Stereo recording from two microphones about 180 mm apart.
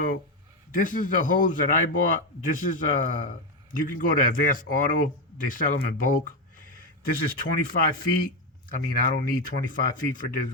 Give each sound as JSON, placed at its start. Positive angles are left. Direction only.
{"t": 0.7, "sound": "a man's voice", "side_deg": 50}